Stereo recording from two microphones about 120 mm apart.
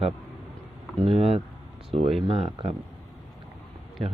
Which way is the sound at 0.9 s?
50° right (ahead or behind).